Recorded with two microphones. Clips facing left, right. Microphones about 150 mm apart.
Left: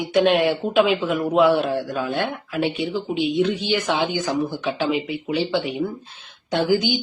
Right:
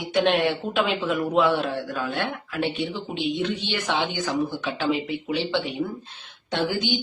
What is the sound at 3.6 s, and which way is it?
Speech, 10° left (ahead or behind).